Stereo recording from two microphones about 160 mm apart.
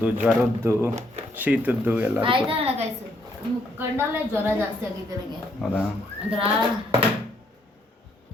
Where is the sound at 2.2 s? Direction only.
35° right (ahead or behind).